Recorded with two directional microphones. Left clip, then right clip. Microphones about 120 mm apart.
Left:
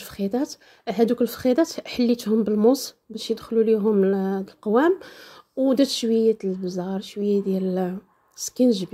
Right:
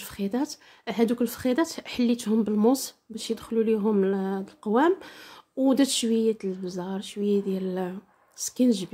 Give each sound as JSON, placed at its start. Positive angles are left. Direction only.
{"t": 0.0, "sound": "a woman's voice", "side_deg": 25}